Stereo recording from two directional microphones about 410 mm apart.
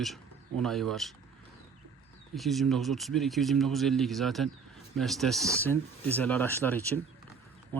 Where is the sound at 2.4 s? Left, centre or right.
Centre.